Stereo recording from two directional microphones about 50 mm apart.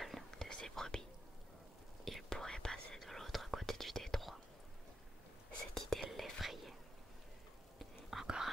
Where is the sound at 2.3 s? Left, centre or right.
Centre.